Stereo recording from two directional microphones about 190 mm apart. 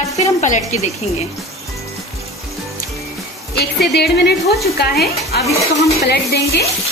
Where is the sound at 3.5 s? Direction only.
60° left (ahead or behind).